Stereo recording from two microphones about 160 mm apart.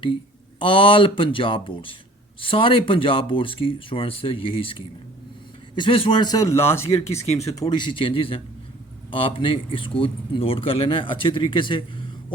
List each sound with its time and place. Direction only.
0.6 s speech: 35° left (ahead or behind); by 7.3 s 15° left (ahead or behind)
7.6 s speech: 30° left (ahead or behind)